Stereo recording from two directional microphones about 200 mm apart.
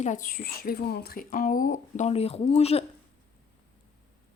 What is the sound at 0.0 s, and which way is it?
A woman's voice, 40° left (ahead or behind).